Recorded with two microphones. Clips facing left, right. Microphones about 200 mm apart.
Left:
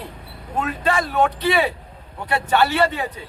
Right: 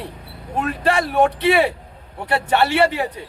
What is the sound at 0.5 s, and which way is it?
Speech, 30° right (ahead or behind).